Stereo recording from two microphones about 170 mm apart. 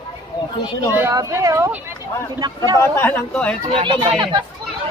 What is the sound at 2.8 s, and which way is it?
Speech, 10° left (ahead or behind).